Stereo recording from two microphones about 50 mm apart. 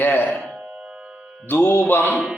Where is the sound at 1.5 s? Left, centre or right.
Left.